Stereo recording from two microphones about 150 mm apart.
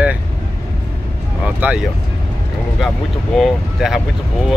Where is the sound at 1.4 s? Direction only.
10° right (ahead or behind).